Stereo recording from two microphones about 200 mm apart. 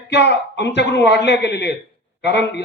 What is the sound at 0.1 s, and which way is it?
A man's voice, 60° left (ahead or behind).